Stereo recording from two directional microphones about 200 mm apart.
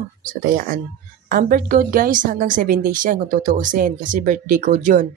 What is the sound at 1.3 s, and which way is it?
A woman's voice, 45° right (ahead or behind).